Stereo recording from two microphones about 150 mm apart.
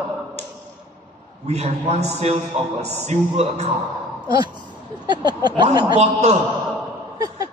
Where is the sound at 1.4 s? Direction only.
45° right (ahead or behind).